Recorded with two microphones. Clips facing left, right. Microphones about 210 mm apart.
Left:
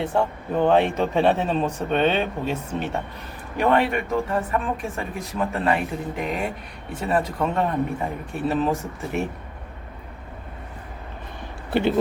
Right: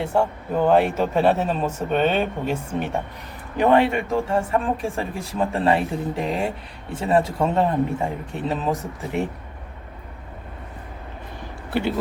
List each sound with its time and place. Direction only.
0.0 s speech: 10° right (ahead or behind)
3.6 s speech: 25° right (ahead or behind)